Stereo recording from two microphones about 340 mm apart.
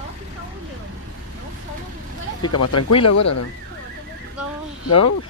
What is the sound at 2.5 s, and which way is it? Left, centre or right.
Speech, left.